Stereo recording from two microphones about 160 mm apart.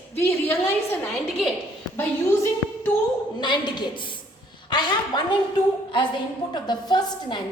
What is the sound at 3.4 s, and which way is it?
Speech, 30° left (ahead or behind).